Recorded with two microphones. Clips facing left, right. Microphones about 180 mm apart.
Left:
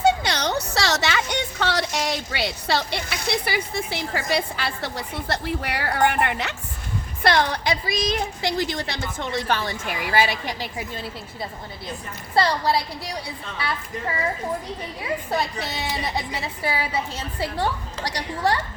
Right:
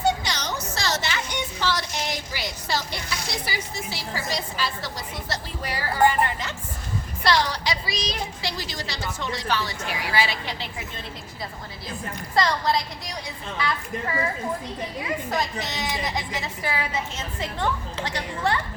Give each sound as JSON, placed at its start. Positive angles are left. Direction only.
{"t": 0.2, "sound": "a sound", "side_deg": 60}
{"t": 6.1, "sound": "a woman's voice", "side_deg": 65}
{"t": 7.2, "sound": "a woman's voice", "side_deg": 55}
{"t": 12.3, "sound": "a woman's voice", "side_deg": 30}
{"t": 15.3, "sound": "a woman's voice", "side_deg": 30}